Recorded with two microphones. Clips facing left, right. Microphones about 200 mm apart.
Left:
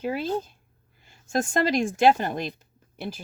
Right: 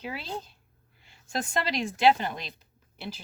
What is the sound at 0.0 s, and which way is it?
Speech, 50° left (ahead or behind).